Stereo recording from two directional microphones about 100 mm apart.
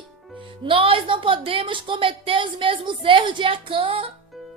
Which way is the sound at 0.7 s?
65° right (ahead or behind).